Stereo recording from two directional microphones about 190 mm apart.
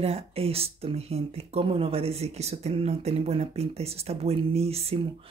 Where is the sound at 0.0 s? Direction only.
30° right (ahead or behind).